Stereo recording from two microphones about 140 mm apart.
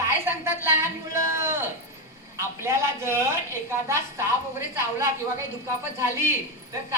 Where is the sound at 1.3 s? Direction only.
20° right (ahead or behind).